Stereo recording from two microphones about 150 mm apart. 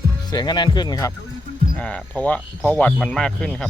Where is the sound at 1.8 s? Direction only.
5° left (ahead or behind).